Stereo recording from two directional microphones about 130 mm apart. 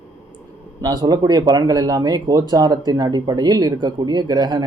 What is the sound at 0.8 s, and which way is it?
Speech, 30° right (ahead or behind).